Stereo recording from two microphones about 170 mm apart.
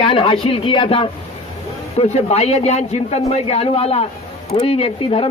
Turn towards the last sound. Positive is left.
turn(degrees=35)  # may be behind; listen again after turning